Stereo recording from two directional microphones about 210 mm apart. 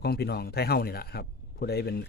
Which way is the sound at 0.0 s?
50° left (ahead or behind).